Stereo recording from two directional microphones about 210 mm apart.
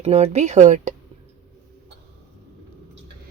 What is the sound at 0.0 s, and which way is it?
Speech, 30° right (ahead or behind).